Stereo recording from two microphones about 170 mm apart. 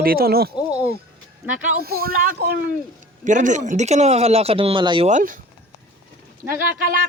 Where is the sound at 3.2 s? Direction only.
45° right (ahead or behind); by 5.0 s 30° right (ahead or behind).